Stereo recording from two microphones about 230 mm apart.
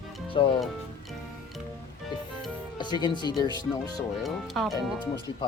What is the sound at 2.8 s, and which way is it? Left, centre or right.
Speech, centre.